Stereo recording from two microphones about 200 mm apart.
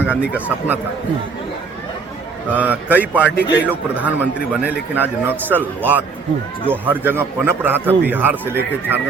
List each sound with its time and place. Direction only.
0.0 s a man's voice: 5° right (ahead or behind)
2.5 s a man's voice: 10° right (ahead or behind)
3.3 s a man's voice: 60° left (ahead or behind)
3.7 s a man's voice: 10° right (ahead or behind)